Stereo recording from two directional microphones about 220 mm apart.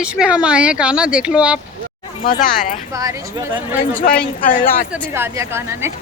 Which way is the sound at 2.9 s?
15° right (ahead or behind).